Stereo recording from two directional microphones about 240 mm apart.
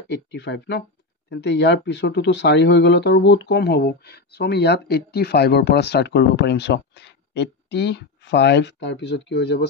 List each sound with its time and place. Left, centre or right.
0.1 s speech: left